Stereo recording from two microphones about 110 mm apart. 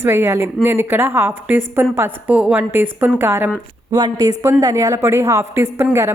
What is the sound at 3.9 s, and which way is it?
A woman's voice, 40° right (ahead or behind).